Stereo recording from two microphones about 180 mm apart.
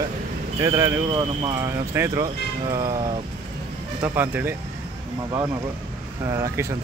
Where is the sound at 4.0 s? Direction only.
10° right (ahead or behind).